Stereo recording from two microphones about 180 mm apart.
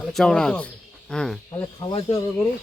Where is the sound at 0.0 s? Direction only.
5° left (ahead or behind).